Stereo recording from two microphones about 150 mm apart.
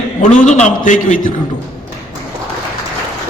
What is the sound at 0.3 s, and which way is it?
Speech, 55° left (ahead or behind).